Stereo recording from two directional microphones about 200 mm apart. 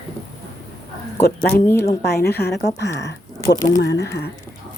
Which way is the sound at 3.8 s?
60° left (ahead or behind).